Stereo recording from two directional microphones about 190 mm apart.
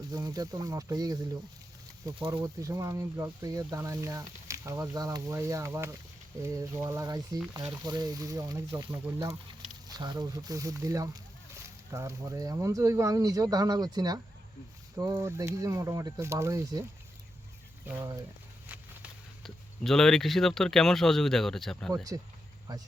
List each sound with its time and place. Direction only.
0.1 s speech: 20° right (ahead or behind)
17.8 s speech: 15° right (ahead or behind)
18.7 s speech: 5° right (ahead or behind)